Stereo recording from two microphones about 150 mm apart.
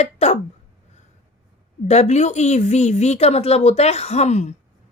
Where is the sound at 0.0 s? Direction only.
45° left (ahead or behind).